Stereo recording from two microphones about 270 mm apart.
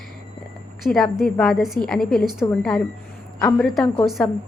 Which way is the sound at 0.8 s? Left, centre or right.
Centre.